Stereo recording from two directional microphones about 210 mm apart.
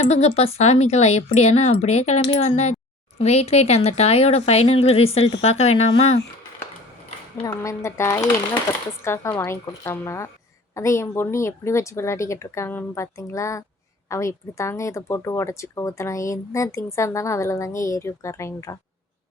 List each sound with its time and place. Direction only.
0.0 s speech: 30° left (ahead or behind)
7.4 s speech: 15° left (ahead or behind)